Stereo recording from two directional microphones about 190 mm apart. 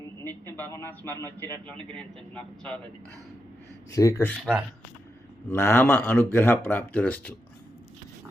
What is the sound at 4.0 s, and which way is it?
Speech, 15° left (ahead or behind).